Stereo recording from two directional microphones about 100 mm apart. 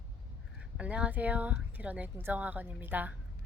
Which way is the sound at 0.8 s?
10° right (ahead or behind).